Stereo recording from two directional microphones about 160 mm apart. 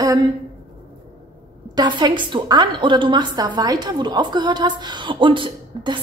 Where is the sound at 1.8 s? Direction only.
25° right (ahead or behind).